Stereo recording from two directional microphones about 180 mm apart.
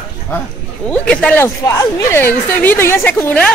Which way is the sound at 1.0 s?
5° left (ahead or behind).